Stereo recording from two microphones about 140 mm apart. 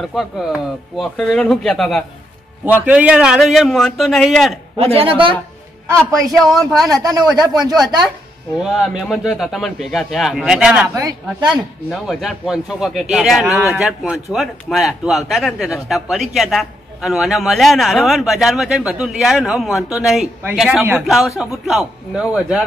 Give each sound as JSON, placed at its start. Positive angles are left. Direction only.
{"t": 0.0, "sound": "a man's voice", "side_deg": 0}
{"t": 2.6, "sound": "a man's voice", "side_deg": -10}
{"t": 4.7, "sound": "a woman's voice", "side_deg": -45}
{"t": 6.3, "sound": "a man's voice", "side_deg": 0}
{"t": 6.9, "sound": "speech", "side_deg": -25}
{"t": 8.5, "sound": "a man's voice", "side_deg": 0}
{"t": 11.0, "sound": "speech", "side_deg": -25}
{"t": 11.4, "sound": "a man's voice", "side_deg": 0}